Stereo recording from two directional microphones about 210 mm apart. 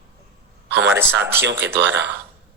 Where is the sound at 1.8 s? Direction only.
60° right (ahead or behind).